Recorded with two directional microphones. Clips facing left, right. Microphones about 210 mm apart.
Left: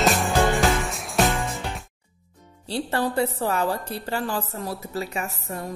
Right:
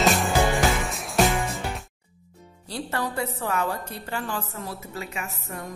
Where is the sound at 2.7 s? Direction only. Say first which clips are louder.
Left 4 dB; 30° left (ahead or behind).